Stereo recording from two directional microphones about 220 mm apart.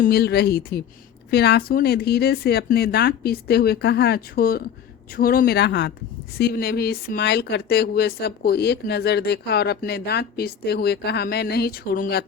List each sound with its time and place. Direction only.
0.0 s speech: 45° left (ahead or behind)